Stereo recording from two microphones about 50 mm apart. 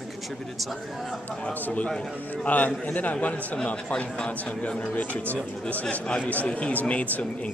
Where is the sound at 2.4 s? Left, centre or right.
Left.